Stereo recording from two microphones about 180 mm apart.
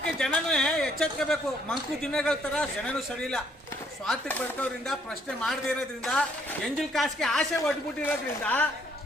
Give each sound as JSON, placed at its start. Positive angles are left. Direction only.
{"t": 0.0, "sound": "speech", "side_deg": 5}